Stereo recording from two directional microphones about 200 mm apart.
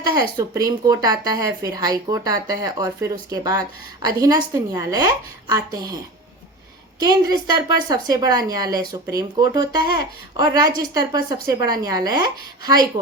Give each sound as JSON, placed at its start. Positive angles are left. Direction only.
{"t": 0.1, "sound": "a woman's voice", "side_deg": -20}
{"t": 7.0, "sound": "a woman's voice", "side_deg": -20}